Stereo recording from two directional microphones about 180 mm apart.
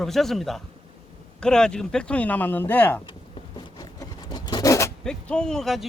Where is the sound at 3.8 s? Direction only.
20° left (ahead or behind).